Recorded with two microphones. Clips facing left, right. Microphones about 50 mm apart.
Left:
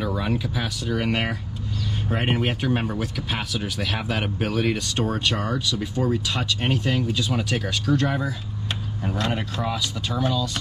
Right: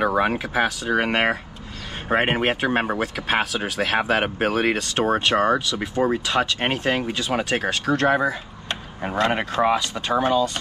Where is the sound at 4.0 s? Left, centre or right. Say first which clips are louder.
Right 6 dB; right.